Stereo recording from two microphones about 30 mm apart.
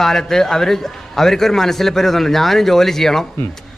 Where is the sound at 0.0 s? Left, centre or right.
Centre.